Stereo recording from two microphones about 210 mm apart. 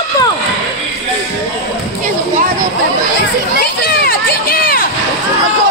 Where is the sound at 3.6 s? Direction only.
45° left (ahead or behind).